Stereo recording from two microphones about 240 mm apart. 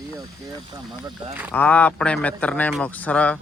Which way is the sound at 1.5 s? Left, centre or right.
Centre.